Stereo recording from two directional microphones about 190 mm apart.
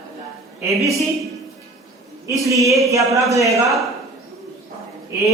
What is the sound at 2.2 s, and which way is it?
Mantra, 15° right (ahead or behind).